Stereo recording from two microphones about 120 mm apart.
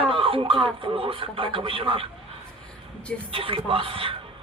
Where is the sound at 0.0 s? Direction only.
50° right (ahead or behind).